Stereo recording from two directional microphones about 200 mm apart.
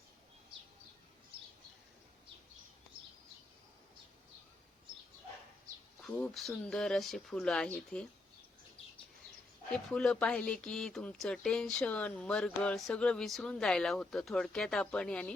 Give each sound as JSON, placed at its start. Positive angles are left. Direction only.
{"t": 6.0, "sound": "speech", "side_deg": 0}
{"t": 9.9, "sound": "speech", "side_deg": 5}